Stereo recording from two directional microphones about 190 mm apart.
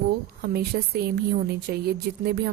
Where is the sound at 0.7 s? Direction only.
55° right (ahead or behind).